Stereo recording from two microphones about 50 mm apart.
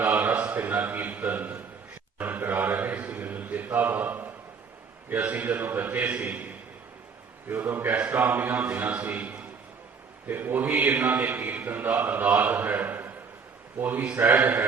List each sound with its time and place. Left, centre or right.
0.0 s a sound: right
0.7 s a man's voice: right
7.4 s a man's voice: right
10.2 s a man's voice: right